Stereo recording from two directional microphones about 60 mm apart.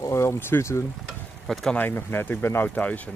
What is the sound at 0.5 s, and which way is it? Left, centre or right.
Speech, left.